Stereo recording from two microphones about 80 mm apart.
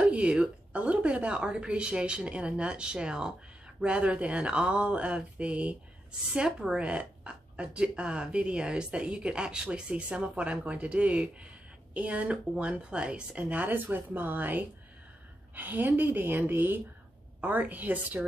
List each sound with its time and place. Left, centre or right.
0.1 s a woman's voice: centre